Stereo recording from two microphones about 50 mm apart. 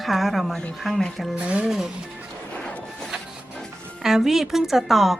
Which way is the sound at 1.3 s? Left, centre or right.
Right.